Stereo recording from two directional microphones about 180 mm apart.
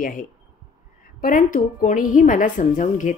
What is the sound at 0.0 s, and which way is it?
Speech, 45° left (ahead or behind).